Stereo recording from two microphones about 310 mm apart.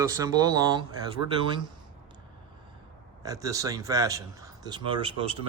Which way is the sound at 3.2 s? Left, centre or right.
Centre.